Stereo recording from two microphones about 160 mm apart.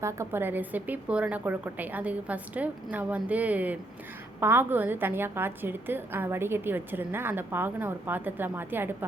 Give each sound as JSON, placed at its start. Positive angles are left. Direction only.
{"t": 0.0, "sound": "a woman's voice", "side_deg": -15}